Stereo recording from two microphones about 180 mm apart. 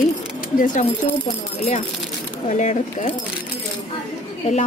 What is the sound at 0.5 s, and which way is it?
Speech, 45° left (ahead or behind).